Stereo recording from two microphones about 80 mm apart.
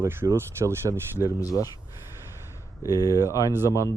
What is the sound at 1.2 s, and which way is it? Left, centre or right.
Speech, left.